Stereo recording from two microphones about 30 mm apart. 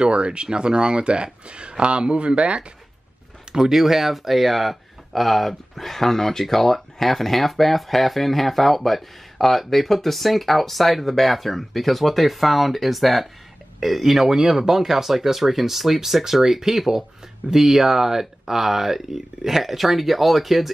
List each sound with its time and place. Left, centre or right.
0.0 s speech: right
3.5 s speech: centre
3.8 s speech: centre